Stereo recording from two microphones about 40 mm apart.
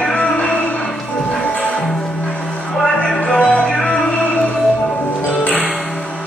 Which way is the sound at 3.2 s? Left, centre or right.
Left.